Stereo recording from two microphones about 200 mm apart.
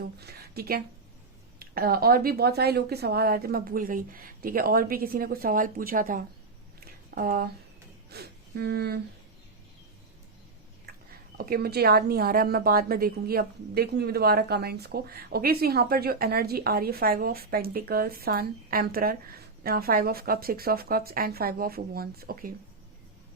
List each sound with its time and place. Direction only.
0.0 s a woman's voice: 50° right (ahead or behind)
6.7 s a sound: 45° right (ahead or behind)
8.1 s speech: 50° right (ahead or behind)
11.3 s a woman's voice: 50° right (ahead or behind)